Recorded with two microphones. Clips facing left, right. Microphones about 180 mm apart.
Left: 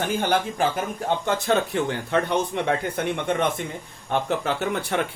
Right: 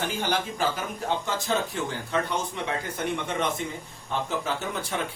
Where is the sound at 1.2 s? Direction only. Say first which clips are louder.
Left 5 dB; 60° left (ahead or behind).